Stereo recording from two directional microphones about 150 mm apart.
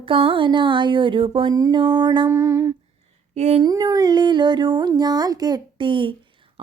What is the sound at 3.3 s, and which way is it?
Speech, 50° right (ahead or behind).